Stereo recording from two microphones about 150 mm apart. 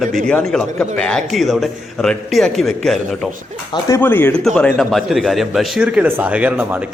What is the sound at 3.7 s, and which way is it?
A man's voice, 20° left (ahead or behind).